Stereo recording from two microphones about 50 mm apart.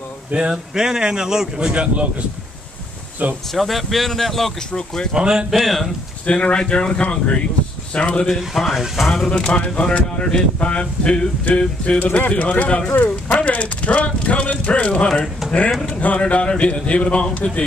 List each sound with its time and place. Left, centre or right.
0.3 s speech: centre
3.2 s speech: right
3.5 s speech: centre
5.1 s speech: centre
5.5 s speech: centre
6.2 s speech: left
8.8 s speech: centre
9.5 s speech: left